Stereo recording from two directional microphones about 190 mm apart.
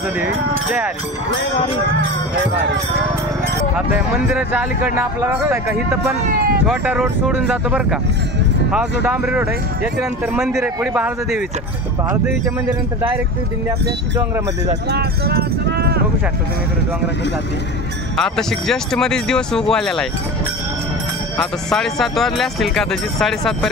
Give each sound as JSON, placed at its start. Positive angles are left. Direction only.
{"t": 4.3, "sound": "speech", "side_deg": -10}
{"t": 6.6, "sound": "speech", "side_deg": -10}
{"t": 9.0, "sound": "speech", "side_deg": -10}
{"t": 14.9, "sound": "speech", "side_deg": -55}
{"t": 18.1, "sound": "speech", "side_deg": 0}
{"t": 21.4, "sound": "speech", "side_deg": 0}